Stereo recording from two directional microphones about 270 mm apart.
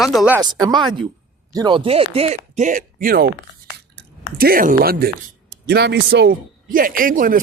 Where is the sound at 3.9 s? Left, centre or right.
Right.